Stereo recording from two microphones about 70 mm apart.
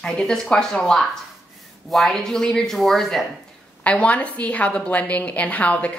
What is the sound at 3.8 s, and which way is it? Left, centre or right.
A woman's voice, centre.